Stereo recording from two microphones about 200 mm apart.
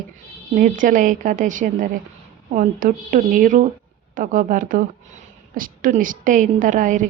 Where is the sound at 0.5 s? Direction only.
45° right (ahead or behind).